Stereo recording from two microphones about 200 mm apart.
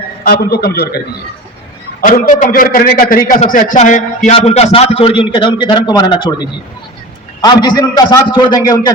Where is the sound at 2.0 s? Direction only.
45° left (ahead or behind).